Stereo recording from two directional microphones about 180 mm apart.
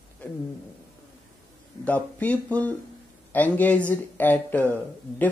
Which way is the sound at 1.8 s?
10° left (ahead or behind).